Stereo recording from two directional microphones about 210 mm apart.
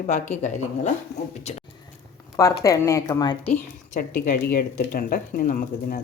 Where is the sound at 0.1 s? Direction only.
35° left (ahead or behind).